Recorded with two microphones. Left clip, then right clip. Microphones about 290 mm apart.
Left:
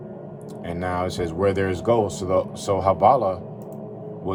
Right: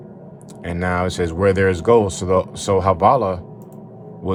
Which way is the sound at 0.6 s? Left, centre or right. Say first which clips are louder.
Right 4 dB; right.